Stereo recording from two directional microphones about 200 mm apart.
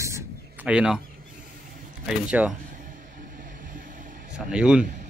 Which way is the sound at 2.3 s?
5° right (ahead or behind).